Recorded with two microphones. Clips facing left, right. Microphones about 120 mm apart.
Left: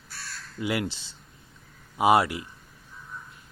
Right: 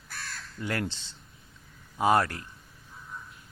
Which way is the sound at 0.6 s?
10° left (ahead or behind).